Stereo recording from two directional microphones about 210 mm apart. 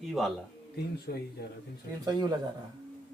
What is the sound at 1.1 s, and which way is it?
Speech, 55° left (ahead or behind).